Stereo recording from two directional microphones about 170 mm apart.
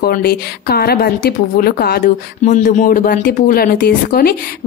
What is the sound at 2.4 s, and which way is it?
A woman's voice, 45° left (ahead or behind).